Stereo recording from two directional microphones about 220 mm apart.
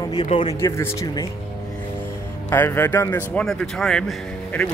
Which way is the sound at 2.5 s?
10° left (ahead or behind).